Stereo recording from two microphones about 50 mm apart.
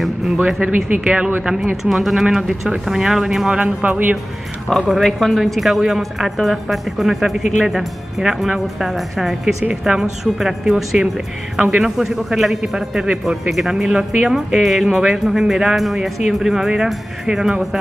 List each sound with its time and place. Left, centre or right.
0.6 s speech: right
1.0 s speech: centre
1.9 s a woman's voice: centre
3.5 s speech: right
4.8 s a woman's voice: centre